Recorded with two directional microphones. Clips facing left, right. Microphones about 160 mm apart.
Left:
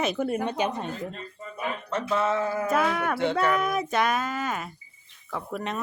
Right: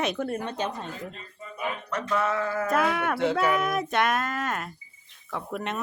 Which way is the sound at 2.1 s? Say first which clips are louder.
Left 1 dB; 25° left (ahead or behind).